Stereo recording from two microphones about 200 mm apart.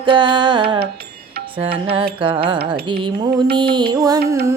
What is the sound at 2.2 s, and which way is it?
Music, 25° right (ahead or behind).